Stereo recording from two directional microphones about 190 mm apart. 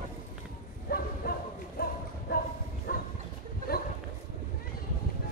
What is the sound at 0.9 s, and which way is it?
Bow-wow, 50° left (ahead or behind).